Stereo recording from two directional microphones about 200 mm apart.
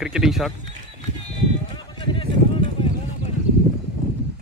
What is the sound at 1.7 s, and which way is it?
Clip-clop, 25° left (ahead or behind).